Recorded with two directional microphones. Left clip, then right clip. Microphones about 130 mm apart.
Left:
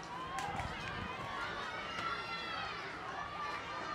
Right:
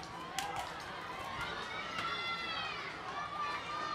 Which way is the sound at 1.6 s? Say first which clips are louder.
Right 1 dB; 15° right (ahead or behind).